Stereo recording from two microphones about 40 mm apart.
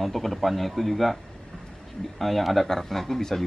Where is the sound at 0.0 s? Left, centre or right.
Centre.